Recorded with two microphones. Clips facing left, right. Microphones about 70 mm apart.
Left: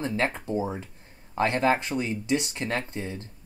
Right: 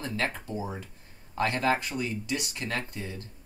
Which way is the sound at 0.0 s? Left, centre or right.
Left.